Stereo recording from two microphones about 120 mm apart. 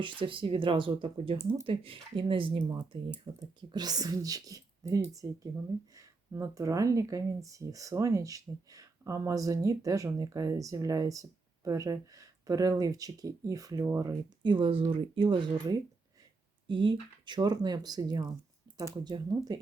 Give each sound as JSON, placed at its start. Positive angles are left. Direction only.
{"t": 0.0, "sound": "speech", "side_deg": -45}
{"t": 3.6, "sound": "speech", "side_deg": -35}
{"t": 14.4, "sound": "speech", "side_deg": -45}